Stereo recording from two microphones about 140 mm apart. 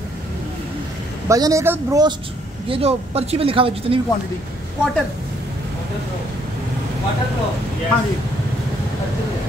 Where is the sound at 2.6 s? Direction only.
40° right (ahead or behind).